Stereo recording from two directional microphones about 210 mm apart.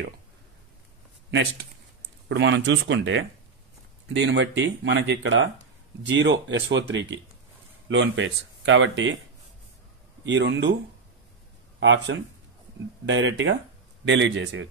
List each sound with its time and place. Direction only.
1.3 s speech: 50° right (ahead or behind)
10.2 s speech: 60° right (ahead or behind)
11.8 s speech: 60° right (ahead or behind)